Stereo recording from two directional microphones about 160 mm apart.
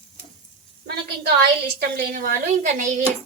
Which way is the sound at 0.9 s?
80° right.